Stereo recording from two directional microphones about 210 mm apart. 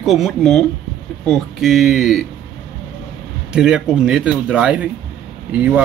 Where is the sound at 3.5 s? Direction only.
5° right (ahead or behind).